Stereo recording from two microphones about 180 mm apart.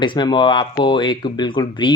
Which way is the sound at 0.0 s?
25° left (ahead or behind).